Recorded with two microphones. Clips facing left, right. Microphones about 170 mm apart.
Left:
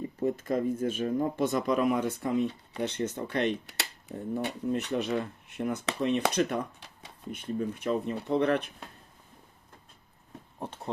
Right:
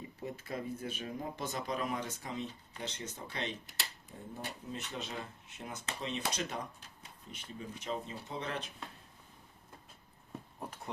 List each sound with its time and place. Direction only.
0.2 s speech: 45° left (ahead or behind); by 7.3 s 80° left
7.3 s speech: 55° left (ahead or behind)
10.6 s a sound: 30° left (ahead or behind)